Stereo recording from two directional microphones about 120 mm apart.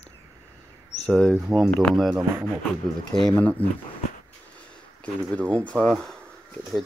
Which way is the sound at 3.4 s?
15° left (ahead or behind).